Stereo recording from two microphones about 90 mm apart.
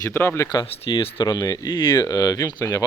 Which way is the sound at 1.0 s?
85° left.